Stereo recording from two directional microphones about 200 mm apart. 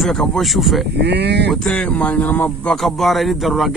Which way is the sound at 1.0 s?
55° right (ahead or behind).